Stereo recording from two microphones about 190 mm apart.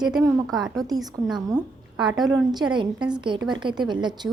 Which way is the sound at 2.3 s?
20° right (ahead or behind).